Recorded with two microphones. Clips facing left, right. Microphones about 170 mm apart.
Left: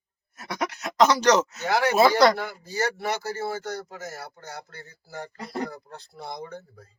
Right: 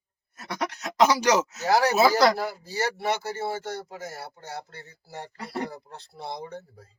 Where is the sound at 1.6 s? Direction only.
35° right (ahead or behind).